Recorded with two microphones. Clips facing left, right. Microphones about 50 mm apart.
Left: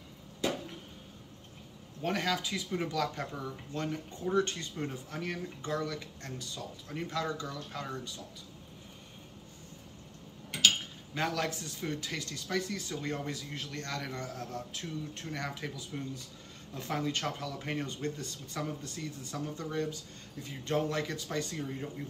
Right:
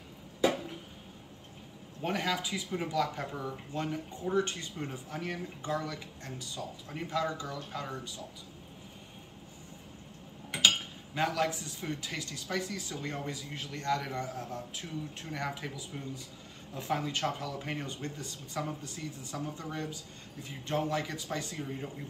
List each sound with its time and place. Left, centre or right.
2.0 s speech: centre
11.1 s a man's voice: centre